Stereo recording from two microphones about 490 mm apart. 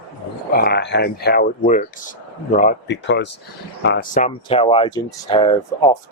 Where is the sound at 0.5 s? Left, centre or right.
Centre.